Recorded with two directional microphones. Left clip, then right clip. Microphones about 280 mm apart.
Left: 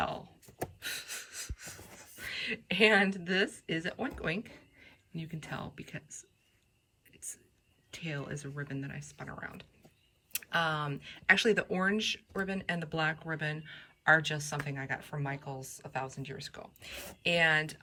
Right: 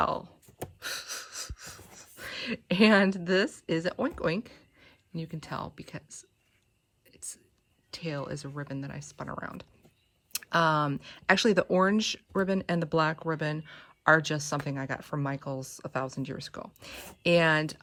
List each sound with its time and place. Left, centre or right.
0.0 s speech: centre
0.8 s a sound: centre
7.9 s speech: centre